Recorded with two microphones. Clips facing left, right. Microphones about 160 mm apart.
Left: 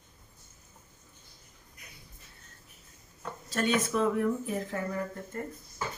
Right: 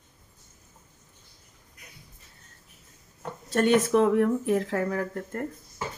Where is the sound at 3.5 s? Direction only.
55° right (ahead or behind).